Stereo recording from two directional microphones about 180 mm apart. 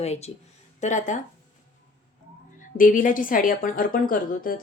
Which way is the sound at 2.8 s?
50° left (ahead or behind).